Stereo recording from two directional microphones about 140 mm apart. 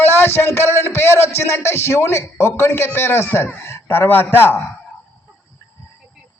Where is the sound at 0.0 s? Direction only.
15° left (ahead or behind).